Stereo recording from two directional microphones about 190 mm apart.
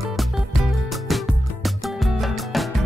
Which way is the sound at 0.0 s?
Centre (ahead or behind).